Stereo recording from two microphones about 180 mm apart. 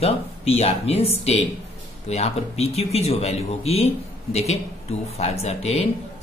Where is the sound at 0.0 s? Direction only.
35° left (ahead or behind).